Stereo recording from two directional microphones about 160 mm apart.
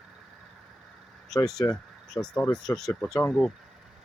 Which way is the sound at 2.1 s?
5° left (ahead or behind).